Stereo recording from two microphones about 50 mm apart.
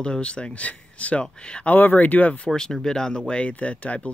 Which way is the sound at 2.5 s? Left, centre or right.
Centre.